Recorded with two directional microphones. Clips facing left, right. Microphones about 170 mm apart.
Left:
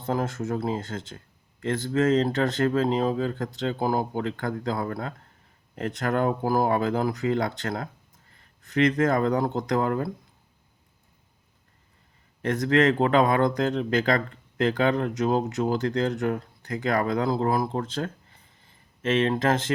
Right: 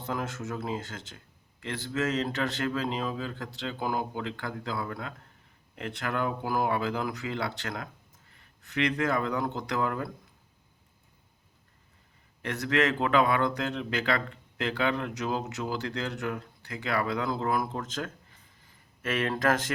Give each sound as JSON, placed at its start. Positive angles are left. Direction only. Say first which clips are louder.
{"t": 0.0, "sound": "speech", "louder": "left 6 dB", "side_deg": 35}
{"t": 12.4, "sound": "speech", "louder": "left 6 dB", "side_deg": 35}
{"t": 19.0, "sound": "speech", "louder": "left 5 dB", "side_deg": 25}